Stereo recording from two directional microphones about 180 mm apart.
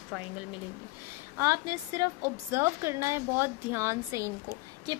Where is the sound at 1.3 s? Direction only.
15° right (ahead or behind).